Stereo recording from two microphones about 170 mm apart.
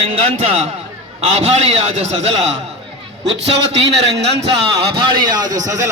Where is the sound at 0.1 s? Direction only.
35° right (ahead or behind).